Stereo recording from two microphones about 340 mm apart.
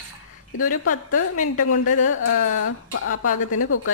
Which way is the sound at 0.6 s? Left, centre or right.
Left.